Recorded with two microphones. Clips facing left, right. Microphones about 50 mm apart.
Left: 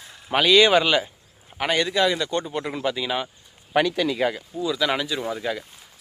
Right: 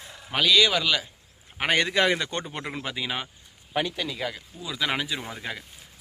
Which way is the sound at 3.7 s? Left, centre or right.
Left.